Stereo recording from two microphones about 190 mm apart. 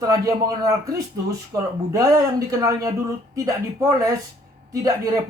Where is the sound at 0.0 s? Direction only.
20° right (ahead or behind).